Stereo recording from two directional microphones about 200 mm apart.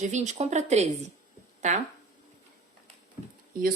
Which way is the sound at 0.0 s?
35° right (ahead or behind).